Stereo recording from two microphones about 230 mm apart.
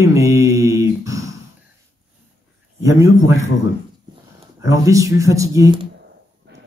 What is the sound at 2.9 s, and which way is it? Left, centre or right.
Speech, centre.